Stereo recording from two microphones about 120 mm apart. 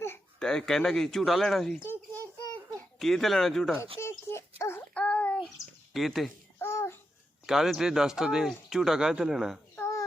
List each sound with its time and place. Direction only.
0.3 s speech: 5° left (ahead or behind)
1.8 s a sound: 15° left (ahead or behind)
3.0 s speech: centre (ahead or behind)
4.0 s child singing: 20° left (ahead or behind)
5.9 s speech: centre (ahead or behind)
6.6 s babbling: 20° left (ahead or behind)
7.4 s speech: 5° right (ahead or behind)
9.7 s a sound: 25° left (ahead or behind)